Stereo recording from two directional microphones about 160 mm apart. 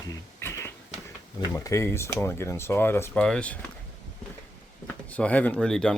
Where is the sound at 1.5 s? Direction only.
20° left (ahead or behind).